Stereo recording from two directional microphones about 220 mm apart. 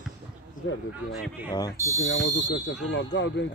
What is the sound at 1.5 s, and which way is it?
Speech, 15° left (ahead or behind).